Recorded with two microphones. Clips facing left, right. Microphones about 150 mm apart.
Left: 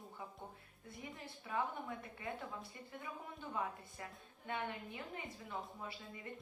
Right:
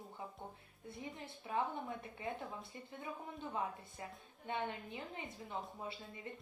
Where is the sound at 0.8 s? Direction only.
25° right (ahead or behind).